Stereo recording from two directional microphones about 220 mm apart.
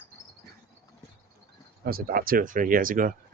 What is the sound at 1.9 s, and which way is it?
Speech, 40° right (ahead or behind).